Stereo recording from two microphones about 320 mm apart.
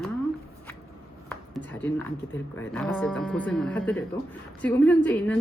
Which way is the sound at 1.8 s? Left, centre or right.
Centre.